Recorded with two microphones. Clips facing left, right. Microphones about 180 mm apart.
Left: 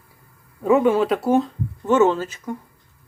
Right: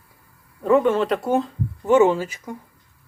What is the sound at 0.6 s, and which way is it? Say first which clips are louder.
Speech: left 1 dB; 10° left (ahead or behind).